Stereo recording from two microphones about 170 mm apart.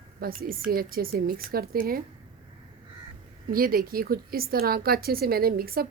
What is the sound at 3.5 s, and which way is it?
A woman's voice, 60° right (ahead or behind).